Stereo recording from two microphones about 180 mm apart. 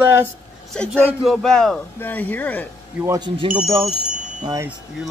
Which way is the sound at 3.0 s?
15° right (ahead or behind).